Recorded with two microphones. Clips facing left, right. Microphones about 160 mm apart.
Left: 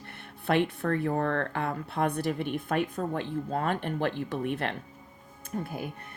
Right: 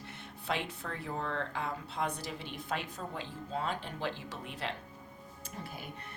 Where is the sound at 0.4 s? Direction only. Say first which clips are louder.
Left 11 dB; 55° left (ahead or behind).